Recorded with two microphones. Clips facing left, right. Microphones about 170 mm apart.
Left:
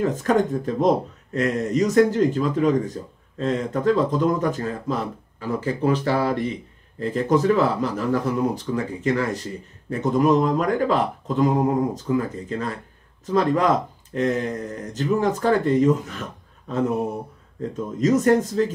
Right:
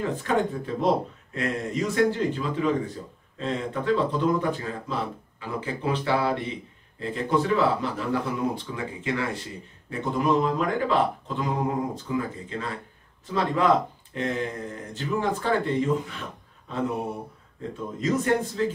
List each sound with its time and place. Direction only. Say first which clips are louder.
0.0 s a man's voice: left 5 dB; 45° left (ahead or behind)
17.7 s a man's voice: left 6 dB; 40° left (ahead or behind)